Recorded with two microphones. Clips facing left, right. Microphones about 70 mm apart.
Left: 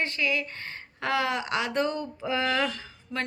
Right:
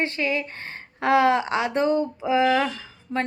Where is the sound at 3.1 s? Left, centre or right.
Right.